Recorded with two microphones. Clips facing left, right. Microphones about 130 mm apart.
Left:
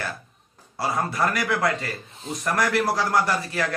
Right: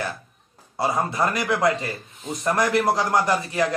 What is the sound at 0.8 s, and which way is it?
A man's voice, 20° right (ahead or behind).